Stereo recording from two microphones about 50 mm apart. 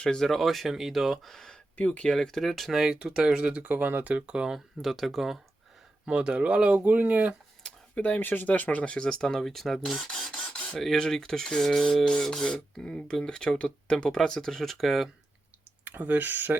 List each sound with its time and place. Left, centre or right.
0.0 s speech: centre
0.3 s speech: centre
1.7 s speech: left
2.1 s speech: centre
3.4 s speech: right
4.3 s speech: centre
4.5 s speech: centre
6.1 s speech: right
6.7 s speech: right
7.9 s speech: left
8.2 s speech: left
9.0 s speech: centre
9.8 s speech: centre
16.0 s speech: right